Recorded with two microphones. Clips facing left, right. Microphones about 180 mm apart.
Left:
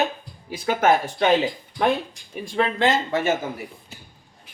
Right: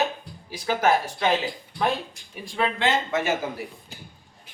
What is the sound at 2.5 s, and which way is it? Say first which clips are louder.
Speech: left 3 dB; 35° left (ahead or behind).